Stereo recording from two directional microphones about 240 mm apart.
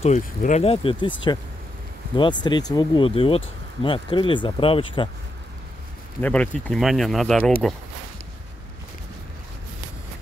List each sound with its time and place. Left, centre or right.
0.0 s speech: left
2.1 s speech: centre
6.2 s speech: centre